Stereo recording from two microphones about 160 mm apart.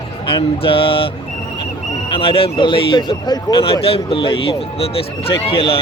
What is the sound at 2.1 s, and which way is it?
Speech, 35° left (ahead or behind).